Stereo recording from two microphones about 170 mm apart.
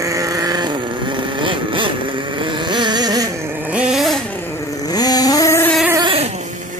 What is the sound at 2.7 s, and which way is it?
Carnatic music, 25° right (ahead or behind).